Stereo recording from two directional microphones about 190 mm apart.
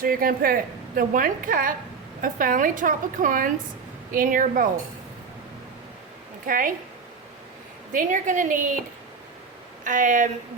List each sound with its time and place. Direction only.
0.0 s a woman's voice: 50° right (ahead or behind)
6.4 s a woman's voice: 45° right (ahead or behind)
7.9 s a woman's voice: 45° right (ahead or behind)
9.8 s a woman's voice: 40° right (ahead or behind)